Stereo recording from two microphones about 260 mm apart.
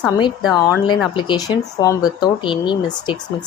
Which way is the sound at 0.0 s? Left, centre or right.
Centre.